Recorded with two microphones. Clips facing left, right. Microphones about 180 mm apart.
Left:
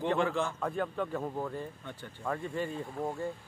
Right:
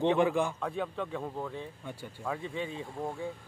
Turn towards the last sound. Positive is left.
turn(degrees=0)  # may be behind; listen again after turning